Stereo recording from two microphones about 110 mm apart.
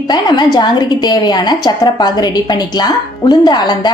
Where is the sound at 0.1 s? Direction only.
40° left (ahead or behind).